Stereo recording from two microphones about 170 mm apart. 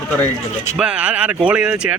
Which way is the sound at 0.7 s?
5° right (ahead or behind).